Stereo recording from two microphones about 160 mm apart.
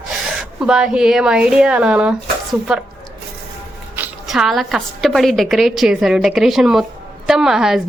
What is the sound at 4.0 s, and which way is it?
A woman's voice, 5° right (ahead or behind).